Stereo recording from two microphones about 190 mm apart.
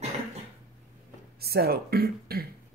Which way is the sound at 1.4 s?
55° right (ahead or behind).